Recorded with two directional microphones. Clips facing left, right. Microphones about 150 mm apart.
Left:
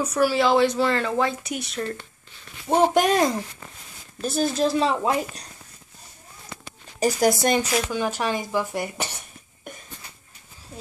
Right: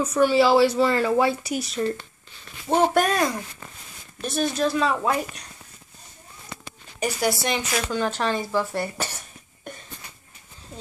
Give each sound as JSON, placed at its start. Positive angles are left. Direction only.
{"t": 0.0, "sound": "speech", "side_deg": 5}
{"t": 2.7, "sound": "speech", "side_deg": 15}
{"t": 7.0, "sound": "speech", "side_deg": 45}
{"t": 7.9, "sound": "speech", "side_deg": 10}